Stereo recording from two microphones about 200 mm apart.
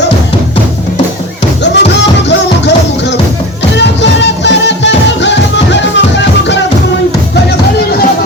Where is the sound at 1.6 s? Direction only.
60° left (ahead or behind).